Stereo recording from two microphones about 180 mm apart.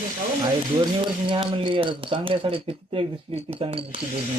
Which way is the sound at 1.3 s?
30° right (ahead or behind).